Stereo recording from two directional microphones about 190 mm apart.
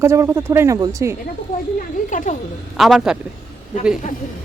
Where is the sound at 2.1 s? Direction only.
40° left (ahead or behind).